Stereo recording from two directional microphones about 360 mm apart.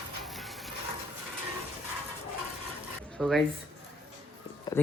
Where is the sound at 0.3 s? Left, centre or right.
Centre.